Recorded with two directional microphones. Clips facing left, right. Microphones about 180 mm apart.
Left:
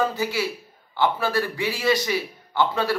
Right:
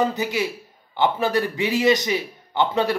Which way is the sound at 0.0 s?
20° right (ahead or behind).